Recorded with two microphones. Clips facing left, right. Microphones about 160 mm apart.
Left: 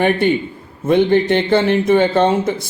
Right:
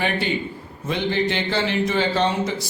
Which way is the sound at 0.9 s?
55° left (ahead or behind).